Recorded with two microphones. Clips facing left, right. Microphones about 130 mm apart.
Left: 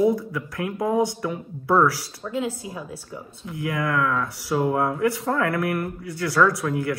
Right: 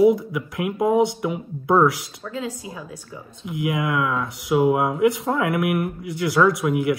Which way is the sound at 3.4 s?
15° right (ahead or behind).